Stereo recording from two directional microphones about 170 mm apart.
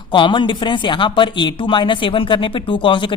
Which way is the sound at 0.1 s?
30° left (ahead or behind).